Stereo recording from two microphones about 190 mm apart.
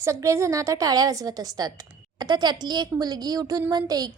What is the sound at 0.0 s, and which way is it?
A woman's voice, 15° right (ahead or behind).